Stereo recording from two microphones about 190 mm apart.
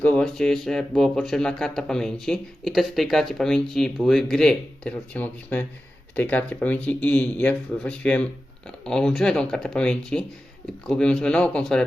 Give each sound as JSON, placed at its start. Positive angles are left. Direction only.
{"t": 0.0, "sound": "speech", "side_deg": 5}